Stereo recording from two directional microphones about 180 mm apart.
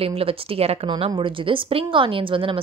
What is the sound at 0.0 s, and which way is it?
A woman's voice, 30° right (ahead or behind).